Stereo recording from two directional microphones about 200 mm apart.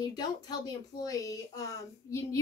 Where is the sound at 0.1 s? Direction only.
20° left (ahead or behind).